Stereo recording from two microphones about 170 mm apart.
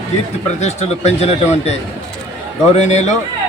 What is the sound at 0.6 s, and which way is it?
A man's voice, 40° left (ahead or behind).